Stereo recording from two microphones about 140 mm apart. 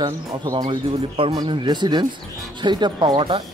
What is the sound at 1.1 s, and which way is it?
Speech, 40° right (ahead or behind).